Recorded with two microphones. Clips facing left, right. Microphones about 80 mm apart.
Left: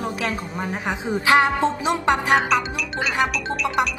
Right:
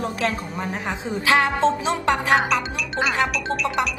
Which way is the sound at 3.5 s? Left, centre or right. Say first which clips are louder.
Left 1 dB; centre.